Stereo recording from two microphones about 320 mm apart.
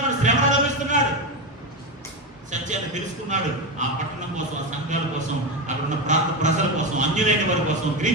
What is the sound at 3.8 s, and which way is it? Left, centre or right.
Speech, right.